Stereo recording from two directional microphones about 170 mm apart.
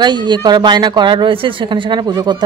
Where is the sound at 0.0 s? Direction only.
25° right (ahead or behind).